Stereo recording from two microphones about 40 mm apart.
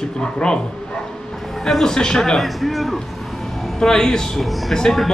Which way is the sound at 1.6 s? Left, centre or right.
Centre.